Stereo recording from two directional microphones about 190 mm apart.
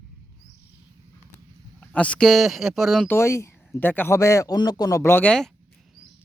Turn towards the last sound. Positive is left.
turn(degrees=5)  # may be behind; listen again after turning